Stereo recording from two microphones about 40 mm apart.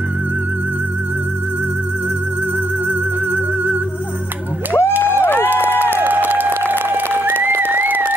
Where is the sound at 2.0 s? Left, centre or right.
Right.